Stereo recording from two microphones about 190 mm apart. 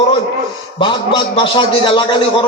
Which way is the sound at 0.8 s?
25° left (ahead or behind).